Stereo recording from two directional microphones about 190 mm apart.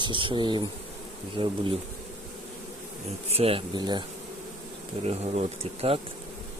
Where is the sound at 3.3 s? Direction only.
30° right (ahead or behind).